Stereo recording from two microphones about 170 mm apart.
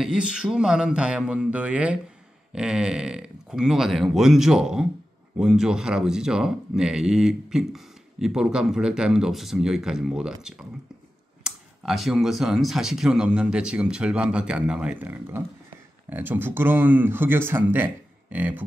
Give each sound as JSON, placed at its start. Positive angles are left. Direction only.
{"t": 0.0, "sound": "speech", "side_deg": -5}